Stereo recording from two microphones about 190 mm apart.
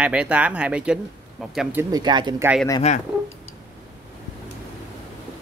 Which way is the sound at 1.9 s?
20° right (ahead or behind).